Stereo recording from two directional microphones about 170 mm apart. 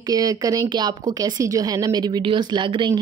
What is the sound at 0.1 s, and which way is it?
Speech, 20° right (ahead or behind).